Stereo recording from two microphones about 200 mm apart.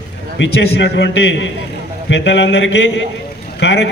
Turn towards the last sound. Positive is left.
turn(degrees=60)  # may be behind; listen again after turning